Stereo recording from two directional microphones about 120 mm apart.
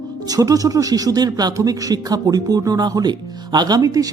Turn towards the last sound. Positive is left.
turn(degrees=-30)  # may be behind; listen again after turning